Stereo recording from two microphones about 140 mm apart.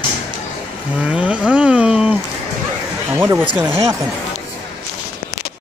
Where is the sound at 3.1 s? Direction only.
15° right (ahead or behind).